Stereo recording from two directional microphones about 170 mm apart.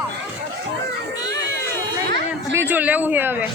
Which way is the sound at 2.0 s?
90° right.